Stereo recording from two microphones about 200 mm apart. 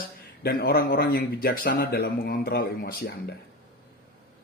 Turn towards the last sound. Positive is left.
turn(degrees=50)  # may be behind; listen again after turning